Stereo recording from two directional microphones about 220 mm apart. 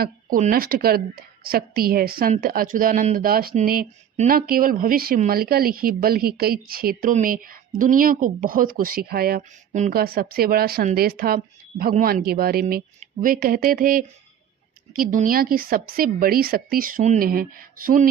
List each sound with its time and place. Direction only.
0.0 s a woman's voice: 40° right (ahead or behind)